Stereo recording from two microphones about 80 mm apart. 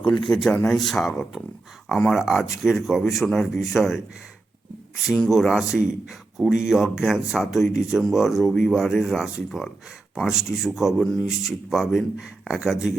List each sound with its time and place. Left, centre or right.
0.0 s a man's voice: centre
5.3 s speech: centre